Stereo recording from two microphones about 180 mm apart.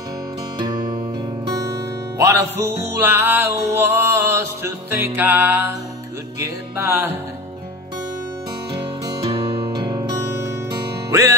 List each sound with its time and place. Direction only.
2.1 s music: 15° right (ahead or behind)
9.8 s music: 20° right (ahead or behind)